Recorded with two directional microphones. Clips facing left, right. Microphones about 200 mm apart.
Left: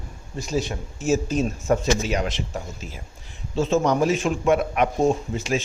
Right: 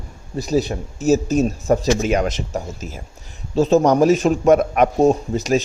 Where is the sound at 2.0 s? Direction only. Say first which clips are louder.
Right 6 dB; 50° right (ahead or behind).